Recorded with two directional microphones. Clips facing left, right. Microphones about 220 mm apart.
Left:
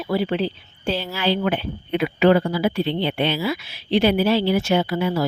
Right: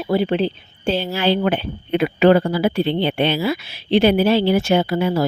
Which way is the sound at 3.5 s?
30° right (ahead or behind).